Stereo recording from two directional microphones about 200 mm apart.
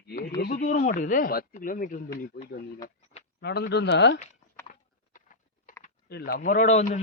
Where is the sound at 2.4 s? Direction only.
60° left (ahead or behind).